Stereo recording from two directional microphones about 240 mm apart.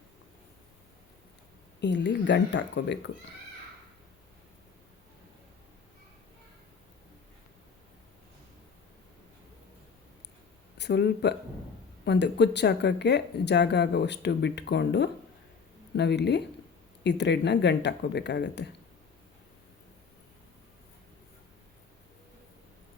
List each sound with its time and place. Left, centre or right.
1.8 s speech: left
10.8 s speech: left